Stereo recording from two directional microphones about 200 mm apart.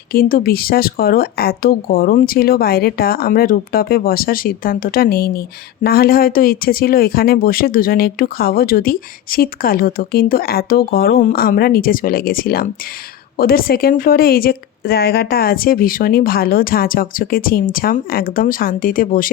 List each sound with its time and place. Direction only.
0.1 s speech: 45° left (ahead or behind)